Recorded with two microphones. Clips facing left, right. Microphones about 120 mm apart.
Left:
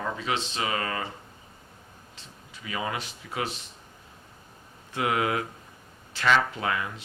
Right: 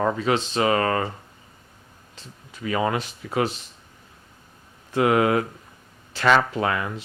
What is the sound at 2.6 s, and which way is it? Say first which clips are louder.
Speech: right 8 dB; 50° right (ahead or behind).